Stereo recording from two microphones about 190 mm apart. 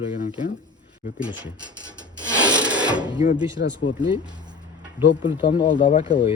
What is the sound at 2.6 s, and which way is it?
Sewing machine, 5° right (ahead or behind).